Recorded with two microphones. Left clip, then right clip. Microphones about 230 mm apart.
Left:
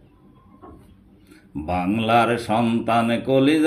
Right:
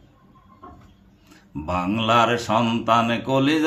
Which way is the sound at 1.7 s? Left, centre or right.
Right.